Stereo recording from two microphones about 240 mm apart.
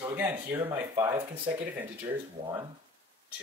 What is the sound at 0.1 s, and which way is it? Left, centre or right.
Speech, centre.